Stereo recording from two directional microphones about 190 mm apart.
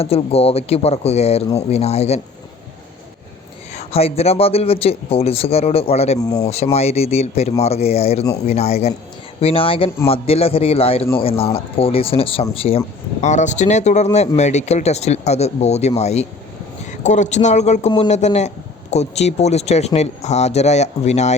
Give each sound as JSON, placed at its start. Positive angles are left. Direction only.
{"t": 0.0, "sound": "speech", "side_deg": 30}
{"t": 3.8, "sound": "speech", "side_deg": 30}